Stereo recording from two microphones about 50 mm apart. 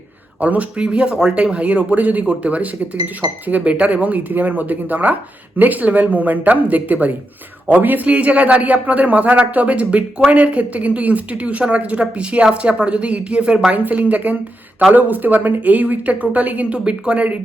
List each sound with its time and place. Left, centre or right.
0.3 s speech: right
0.8 s a man's voice: right
16.7 s a man's voice: right